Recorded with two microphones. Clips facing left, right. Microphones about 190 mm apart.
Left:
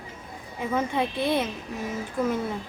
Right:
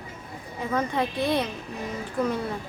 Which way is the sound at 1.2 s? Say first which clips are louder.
Even; 25° left (ahead or behind).